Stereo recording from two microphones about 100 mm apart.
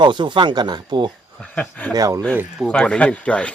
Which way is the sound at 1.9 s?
35° right (ahead or behind).